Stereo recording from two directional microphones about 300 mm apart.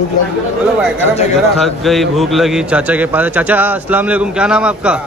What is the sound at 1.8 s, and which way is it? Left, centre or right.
A man's voice, centre.